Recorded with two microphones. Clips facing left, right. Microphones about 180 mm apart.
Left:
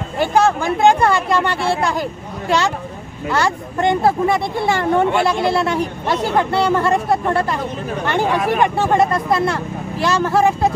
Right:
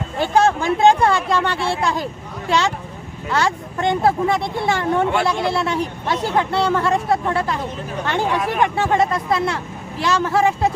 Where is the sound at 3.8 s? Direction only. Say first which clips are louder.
Left 2 dB; 5° left (ahead or behind).